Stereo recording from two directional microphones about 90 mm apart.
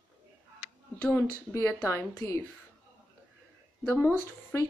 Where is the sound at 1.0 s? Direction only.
25° left (ahead or behind).